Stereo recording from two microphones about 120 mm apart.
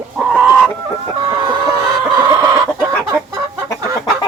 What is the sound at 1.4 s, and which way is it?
Chicken, 35° right (ahead or behind).